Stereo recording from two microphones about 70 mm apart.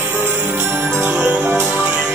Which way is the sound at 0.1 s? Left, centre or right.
Right.